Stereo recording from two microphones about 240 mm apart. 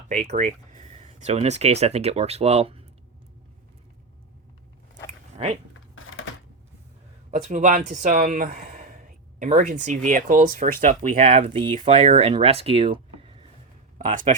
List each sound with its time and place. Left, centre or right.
0.2 s speech: right
5.9 s a sound: left
7.3 s speech: right